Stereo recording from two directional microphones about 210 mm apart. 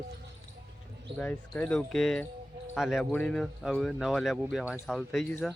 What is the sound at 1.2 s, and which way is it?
Speech, 5° left (ahead or behind).